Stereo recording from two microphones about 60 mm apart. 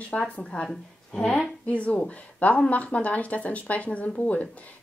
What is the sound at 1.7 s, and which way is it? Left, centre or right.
A woman's voice, left.